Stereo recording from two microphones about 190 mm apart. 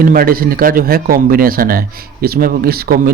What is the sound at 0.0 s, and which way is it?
Speech, 50° right (ahead or behind).